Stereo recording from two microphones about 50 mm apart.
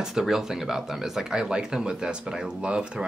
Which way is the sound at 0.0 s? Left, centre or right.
Centre.